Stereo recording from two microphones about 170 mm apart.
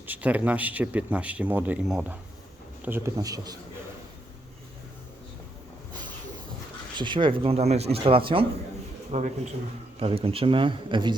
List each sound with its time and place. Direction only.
0.0 s speech: 10° right (ahead or behind)
6.9 s speech: 30° right (ahead or behind)
9.1 s a man's voice: 45° right (ahead or behind); by 11.2 s 25° right (ahead or behind)